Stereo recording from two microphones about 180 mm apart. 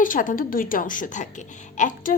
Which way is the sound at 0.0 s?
45° left (ahead or behind).